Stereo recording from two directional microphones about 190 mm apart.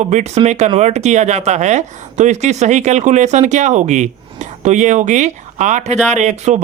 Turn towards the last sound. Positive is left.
turn(degrees=-40)  # may be behind; listen again after turning